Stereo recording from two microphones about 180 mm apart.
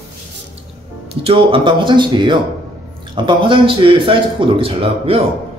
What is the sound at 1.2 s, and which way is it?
A man's voice, 30° right (ahead or behind).